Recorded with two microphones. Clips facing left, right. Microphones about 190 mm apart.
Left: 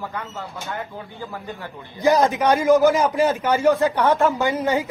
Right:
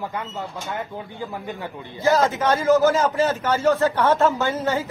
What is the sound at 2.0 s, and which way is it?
A man's voice, 15° left (ahead or behind).